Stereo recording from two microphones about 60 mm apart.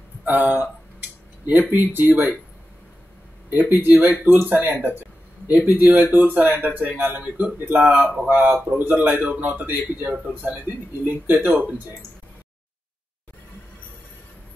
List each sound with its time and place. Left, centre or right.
0.2 s speech: right
3.5 s a man's voice: right